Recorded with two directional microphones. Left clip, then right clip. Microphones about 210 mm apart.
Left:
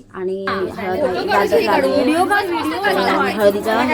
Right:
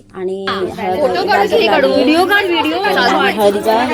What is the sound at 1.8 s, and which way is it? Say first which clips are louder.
A woman's voice: right 4 dB; 20° right (ahead or behind).